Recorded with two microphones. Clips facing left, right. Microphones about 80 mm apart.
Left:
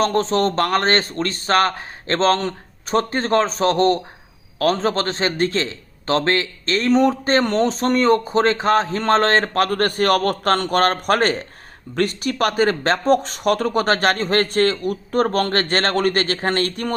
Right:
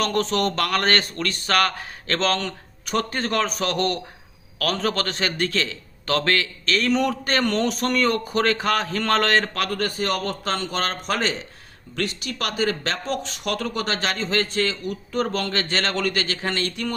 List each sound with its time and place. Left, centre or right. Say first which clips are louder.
0.0 s a man's voice: left 4 dB; left